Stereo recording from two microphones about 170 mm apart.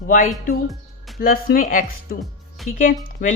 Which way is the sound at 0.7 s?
Centre (ahead or behind).